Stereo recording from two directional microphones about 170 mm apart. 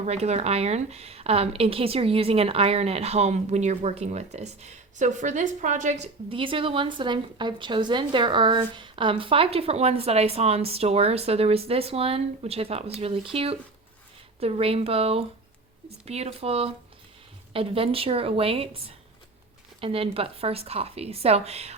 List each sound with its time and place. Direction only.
0.0 s a woman's voice: 40° right (ahead or behind)